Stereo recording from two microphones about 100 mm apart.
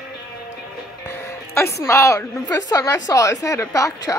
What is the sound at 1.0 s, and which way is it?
A woman's voice, 25° left (ahead or behind).